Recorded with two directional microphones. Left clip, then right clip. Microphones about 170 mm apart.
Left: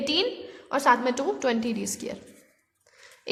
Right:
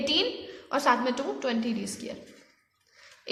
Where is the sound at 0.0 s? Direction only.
30° left (ahead or behind).